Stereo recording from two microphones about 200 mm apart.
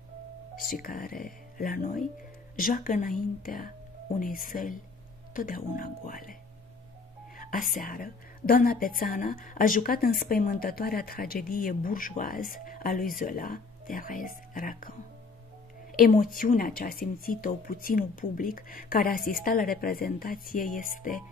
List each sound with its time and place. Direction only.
0.7 s speech: 45° left (ahead or behind)
7.3 s speech: 45° left (ahead or behind)